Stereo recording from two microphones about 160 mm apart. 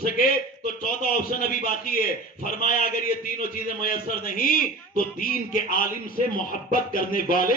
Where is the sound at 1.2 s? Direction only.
60° left (ahead or behind).